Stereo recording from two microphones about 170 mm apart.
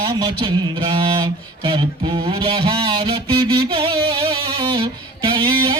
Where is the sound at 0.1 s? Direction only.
35° right (ahead or behind).